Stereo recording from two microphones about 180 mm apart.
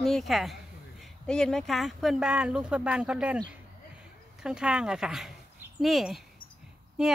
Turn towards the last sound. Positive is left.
turn(degrees=-5)  # may be behind; listen again after turning